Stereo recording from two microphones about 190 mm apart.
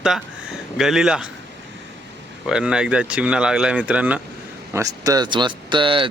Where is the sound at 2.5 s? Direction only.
5° right (ahead or behind).